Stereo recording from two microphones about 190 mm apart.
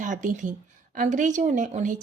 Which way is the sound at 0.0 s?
40° right (ahead or behind).